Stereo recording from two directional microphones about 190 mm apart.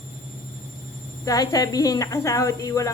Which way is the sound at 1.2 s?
20° left (ahead or behind).